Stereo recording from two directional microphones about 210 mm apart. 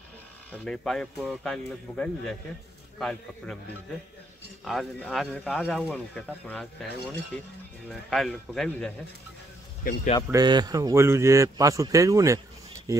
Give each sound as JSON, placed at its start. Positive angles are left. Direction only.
{"t": 0.5, "sound": "speech", "side_deg": 5}
{"t": 4.6, "sound": "speech", "side_deg": 0}
{"t": 10.3, "sound": "a man's voice", "side_deg": -20}